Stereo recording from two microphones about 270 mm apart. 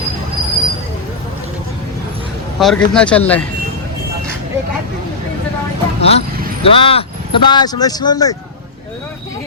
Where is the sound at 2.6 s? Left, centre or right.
Centre.